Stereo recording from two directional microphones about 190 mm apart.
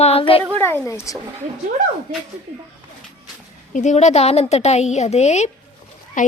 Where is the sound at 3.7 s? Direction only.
40° left (ahead or behind).